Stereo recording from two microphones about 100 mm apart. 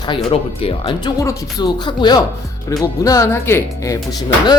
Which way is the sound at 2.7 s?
35° left (ahead or behind).